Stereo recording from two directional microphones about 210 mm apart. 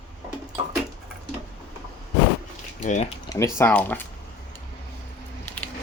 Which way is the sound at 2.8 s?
35° left (ahead or behind).